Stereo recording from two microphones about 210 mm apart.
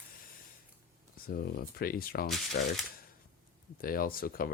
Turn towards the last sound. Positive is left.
turn(degrees=45)  # may be behind; listen again after turning